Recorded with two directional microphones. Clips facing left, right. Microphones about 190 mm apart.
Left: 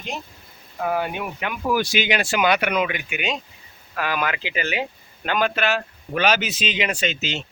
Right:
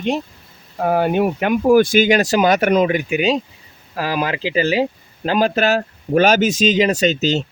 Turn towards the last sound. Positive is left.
turn(degrees=-40)  # may be behind; listen again after turning